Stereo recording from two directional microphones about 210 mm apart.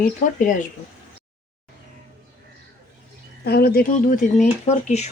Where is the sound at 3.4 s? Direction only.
50° left (ahead or behind); by 5.1 s 35° left (ahead or behind).